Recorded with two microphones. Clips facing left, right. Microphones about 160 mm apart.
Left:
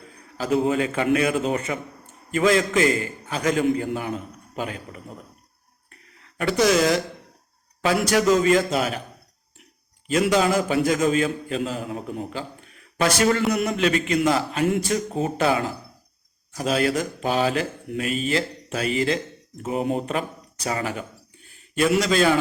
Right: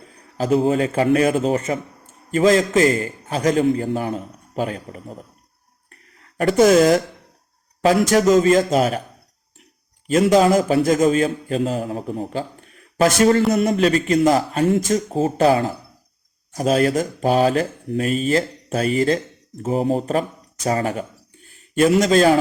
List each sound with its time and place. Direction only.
0.3 s a man's voice: 35° right (ahead or behind)
5.9 s a sound: 40° right (ahead or behind)
7.8 s a man's voice: 40° right (ahead or behind)
10.1 s a man's voice: 40° right (ahead or behind)